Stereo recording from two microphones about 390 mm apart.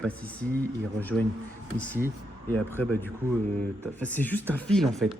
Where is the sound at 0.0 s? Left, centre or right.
Centre.